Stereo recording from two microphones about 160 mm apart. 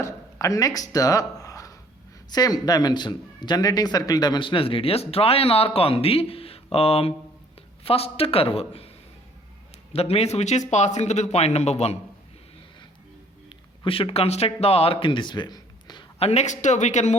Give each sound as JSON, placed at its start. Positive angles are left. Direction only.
{"t": 0.0, "sound": "speech", "side_deg": 20}
{"t": 9.9, "sound": "a man's voice", "side_deg": 40}
{"t": 13.8, "sound": "speech", "side_deg": 35}
{"t": 16.1, "sound": "a man's voice", "side_deg": 40}